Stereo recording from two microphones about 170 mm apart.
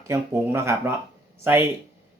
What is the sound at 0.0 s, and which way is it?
Speech, 15° right (ahead or behind).